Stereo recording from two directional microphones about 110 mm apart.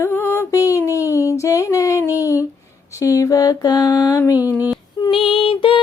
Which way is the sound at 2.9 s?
30° left (ahead or behind).